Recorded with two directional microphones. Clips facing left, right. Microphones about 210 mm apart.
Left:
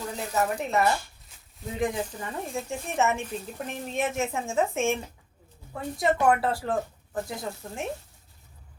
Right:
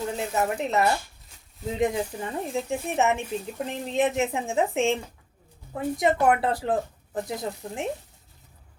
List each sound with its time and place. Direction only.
0.2 s speech: 20° right (ahead or behind)